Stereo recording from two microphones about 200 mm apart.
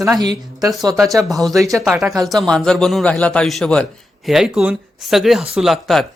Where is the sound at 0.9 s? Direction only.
Centre (ahead or behind).